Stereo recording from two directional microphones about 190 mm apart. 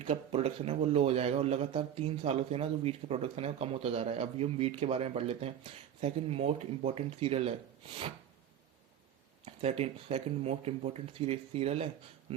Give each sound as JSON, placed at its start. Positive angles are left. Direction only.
{"t": 0.0, "sound": "a man's voice", "side_deg": -30}
{"t": 9.5, "sound": "a man's voice", "side_deg": -35}